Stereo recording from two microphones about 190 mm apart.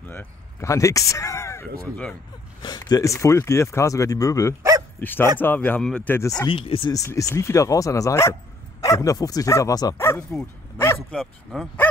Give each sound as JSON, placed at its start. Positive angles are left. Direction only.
{"t": 0.1, "sound": "speech", "side_deg": 15}
{"t": 6.5, "sound": "speech", "side_deg": 30}
{"t": 10.8, "sound": "bow-wow", "side_deg": 10}
{"t": 11.1, "sound": "speech", "side_deg": 0}